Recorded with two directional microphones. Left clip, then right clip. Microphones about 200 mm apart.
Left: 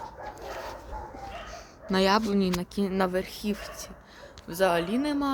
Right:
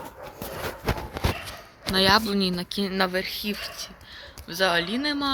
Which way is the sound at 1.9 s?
5° left (ahead or behind).